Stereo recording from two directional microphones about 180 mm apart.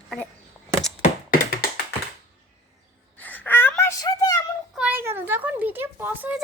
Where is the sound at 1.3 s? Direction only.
60° left (ahead or behind).